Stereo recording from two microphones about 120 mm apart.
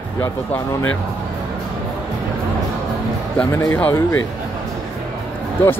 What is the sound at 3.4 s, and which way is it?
Speech, 20° left (ahead or behind).